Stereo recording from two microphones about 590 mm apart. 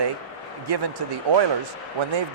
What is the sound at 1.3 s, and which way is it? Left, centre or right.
Speech, right.